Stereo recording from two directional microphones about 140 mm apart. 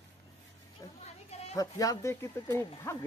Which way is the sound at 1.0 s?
50° left (ahead or behind).